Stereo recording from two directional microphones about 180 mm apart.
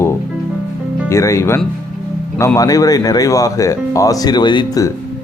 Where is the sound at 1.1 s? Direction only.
15° left (ahead or behind).